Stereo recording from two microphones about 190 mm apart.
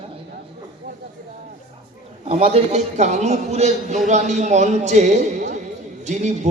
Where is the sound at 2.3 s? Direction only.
30° right (ahead or behind).